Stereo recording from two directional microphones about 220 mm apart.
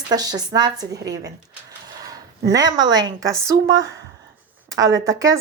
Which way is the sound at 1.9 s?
15° right (ahead or behind).